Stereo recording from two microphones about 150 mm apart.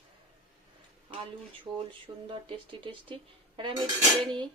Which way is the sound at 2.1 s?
30° right (ahead or behind).